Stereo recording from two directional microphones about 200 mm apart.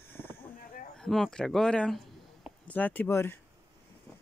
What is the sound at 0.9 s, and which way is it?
Speech, centre (ahead or behind).